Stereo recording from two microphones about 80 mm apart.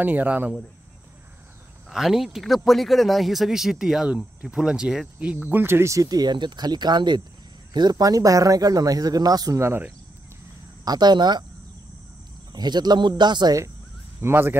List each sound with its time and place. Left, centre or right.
0.0 s speech: right
1.9 s a man's voice: centre; by 6.0 s right
6.0 s speech: right
9.6 s speech: right
10.9 s speech: right
12.5 s speech: right
14.2 s speech: right